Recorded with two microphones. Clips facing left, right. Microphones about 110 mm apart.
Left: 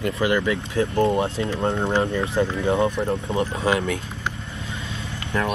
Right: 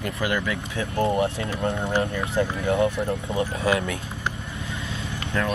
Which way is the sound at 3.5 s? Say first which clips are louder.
Even; 25° left (ahead or behind).